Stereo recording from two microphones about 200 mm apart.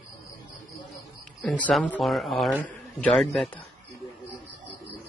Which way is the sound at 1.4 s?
5° left (ahead or behind).